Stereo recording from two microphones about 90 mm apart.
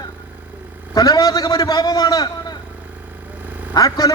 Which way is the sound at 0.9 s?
45° left (ahead or behind).